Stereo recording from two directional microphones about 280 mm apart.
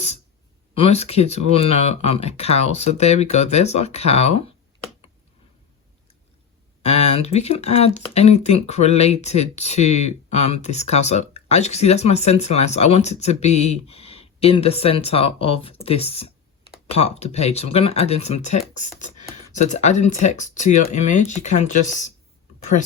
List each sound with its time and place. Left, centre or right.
0.7 s speech: left
6.8 s speech: left